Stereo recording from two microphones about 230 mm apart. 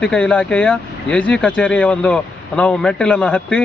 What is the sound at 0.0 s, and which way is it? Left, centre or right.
Speech, centre.